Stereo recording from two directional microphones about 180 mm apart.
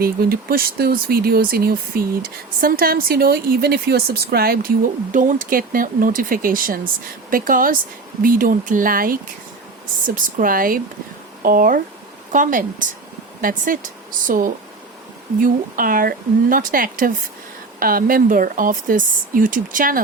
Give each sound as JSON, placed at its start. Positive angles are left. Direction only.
{"t": 0.0, "sound": "speech", "side_deg": -55}
{"t": 5.1, "sound": "speech", "side_deg": -45}
{"t": 10.2, "sound": "speech", "side_deg": -50}